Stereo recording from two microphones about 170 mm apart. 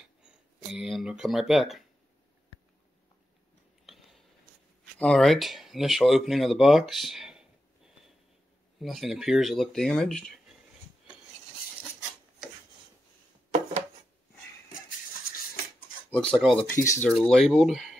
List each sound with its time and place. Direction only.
0.7 s speech: 5° right (ahead or behind)
3.8 s a sound: centre (ahead or behind)
4.9 s speech: 5° left (ahead or behind)
8.7 s speech: centre (ahead or behind)
16.1 s speech: 5° left (ahead or behind)
16.8 s speech: 15° left (ahead or behind)
17.2 s speech: centre (ahead or behind)